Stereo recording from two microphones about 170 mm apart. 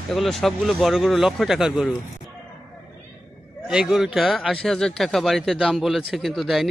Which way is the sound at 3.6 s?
Centre (ahead or behind).